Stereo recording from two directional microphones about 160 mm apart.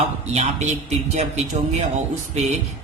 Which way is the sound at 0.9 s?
45° right (ahead or behind).